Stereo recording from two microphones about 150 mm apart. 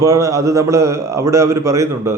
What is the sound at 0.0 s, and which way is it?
A man's voice, 20° right (ahead or behind).